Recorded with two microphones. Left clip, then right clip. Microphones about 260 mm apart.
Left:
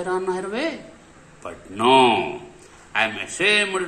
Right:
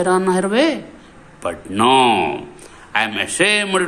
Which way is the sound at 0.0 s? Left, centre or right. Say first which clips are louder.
Right 8 dB; right.